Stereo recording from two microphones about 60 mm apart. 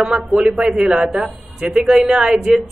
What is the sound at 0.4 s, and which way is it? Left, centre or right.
A woman's voice, centre.